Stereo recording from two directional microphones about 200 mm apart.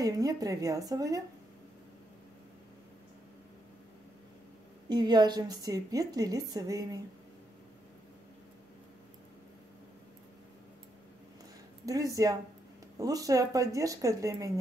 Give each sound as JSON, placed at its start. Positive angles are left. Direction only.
{"t": 0.0, "sound": "a woman's voice", "side_deg": -15}
{"t": 4.8, "sound": "a woman's voice", "side_deg": -20}
{"t": 11.8, "sound": "a woman's voice", "side_deg": -15}